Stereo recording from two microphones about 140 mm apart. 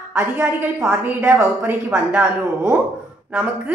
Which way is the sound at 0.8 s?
Centre (ahead or behind).